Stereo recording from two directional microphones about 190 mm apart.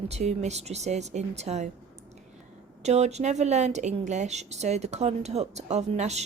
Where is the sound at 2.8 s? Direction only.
35° right (ahead or behind).